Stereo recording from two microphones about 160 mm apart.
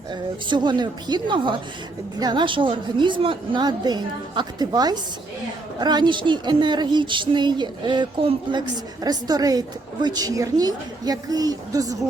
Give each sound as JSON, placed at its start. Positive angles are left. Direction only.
{"t": 0.1, "sound": "speech", "side_deg": -30}